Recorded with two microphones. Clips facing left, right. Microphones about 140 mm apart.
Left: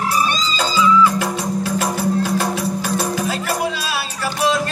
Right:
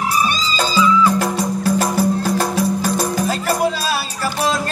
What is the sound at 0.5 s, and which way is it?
Music, 40° right (ahead or behind).